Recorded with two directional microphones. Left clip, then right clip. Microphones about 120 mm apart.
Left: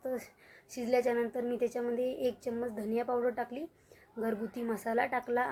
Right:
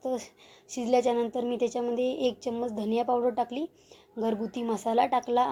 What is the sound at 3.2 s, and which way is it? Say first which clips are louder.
Speech: right 6 dB; 30° right (ahead or behind).